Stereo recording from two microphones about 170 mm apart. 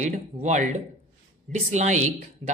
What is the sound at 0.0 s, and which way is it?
Speech, 45° right (ahead or behind).